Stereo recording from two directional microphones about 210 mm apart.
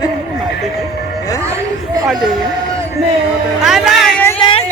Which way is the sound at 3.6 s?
Centre (ahead or behind).